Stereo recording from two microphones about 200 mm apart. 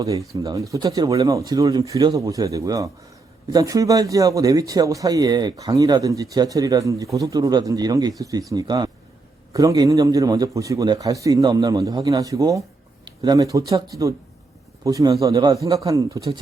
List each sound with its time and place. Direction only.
0.0 s speech: 15° right (ahead or behind)